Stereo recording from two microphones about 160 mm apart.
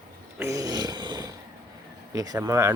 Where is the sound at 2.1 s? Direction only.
20° right (ahead or behind).